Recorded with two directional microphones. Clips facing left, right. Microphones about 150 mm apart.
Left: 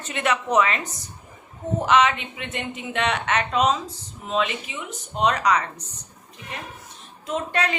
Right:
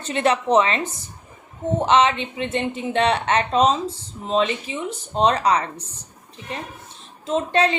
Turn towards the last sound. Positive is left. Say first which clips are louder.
# right 5 dB
turn(degrees=-25)  # may be behind; listen again after turning